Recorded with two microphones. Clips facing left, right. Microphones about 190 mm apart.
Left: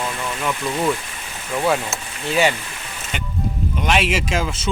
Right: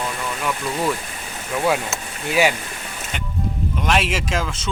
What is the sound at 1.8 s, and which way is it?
Speech, 10° right (ahead or behind).